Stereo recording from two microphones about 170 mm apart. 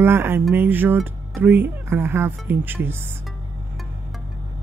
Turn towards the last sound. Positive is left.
turn(degrees=-15)  # may be behind; listen again after turning